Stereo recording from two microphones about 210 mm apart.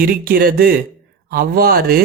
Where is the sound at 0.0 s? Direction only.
45° right (ahead or behind).